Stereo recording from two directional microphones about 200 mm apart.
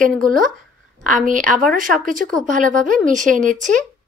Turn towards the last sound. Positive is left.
turn(degrees=-40)  # may be behind; listen again after turning